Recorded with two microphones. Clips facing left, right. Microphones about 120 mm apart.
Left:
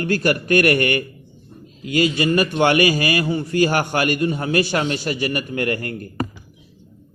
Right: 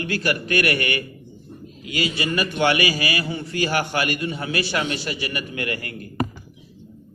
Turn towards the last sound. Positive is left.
turn(degrees=45)  # may be behind; listen again after turning